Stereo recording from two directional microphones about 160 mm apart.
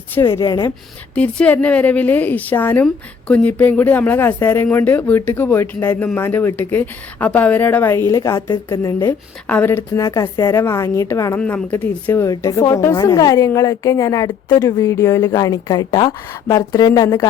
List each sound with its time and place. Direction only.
0.1 s a woman's voice: 15° left (ahead or behind)
1.1 s a woman's voice: 10° left (ahead or behind)